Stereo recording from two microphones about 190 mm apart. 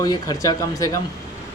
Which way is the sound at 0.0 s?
20° left (ahead or behind).